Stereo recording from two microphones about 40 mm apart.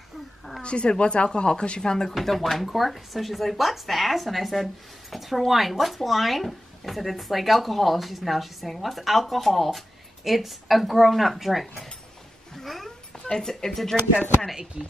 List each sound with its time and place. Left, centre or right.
0.6 s speech: left
2.1 s speech: centre
12.5 s cat: centre
13.3 s speech: centre
14.8 s speech: centre